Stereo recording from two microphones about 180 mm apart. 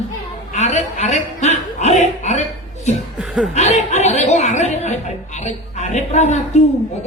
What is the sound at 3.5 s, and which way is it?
A man's voice, 40° left (ahead or behind).